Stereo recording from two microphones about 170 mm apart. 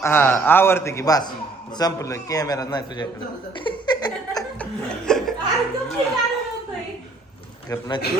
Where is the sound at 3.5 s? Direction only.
30° left (ahead or behind).